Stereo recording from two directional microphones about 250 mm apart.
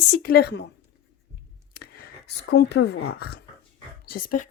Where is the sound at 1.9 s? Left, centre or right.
Left.